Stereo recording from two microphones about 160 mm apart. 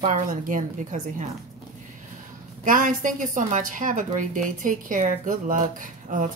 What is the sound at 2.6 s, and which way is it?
A woman's voice, 55° right (ahead or behind).